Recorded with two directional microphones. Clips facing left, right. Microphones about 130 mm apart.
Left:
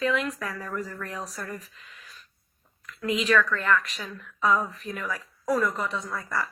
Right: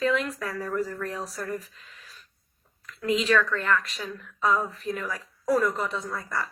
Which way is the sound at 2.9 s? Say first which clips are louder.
Right 1 dB; 35° right (ahead or behind).